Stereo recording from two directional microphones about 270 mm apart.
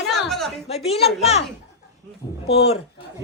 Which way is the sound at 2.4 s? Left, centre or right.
Left.